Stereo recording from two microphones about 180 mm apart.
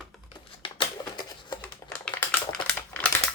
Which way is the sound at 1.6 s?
10° left (ahead or behind).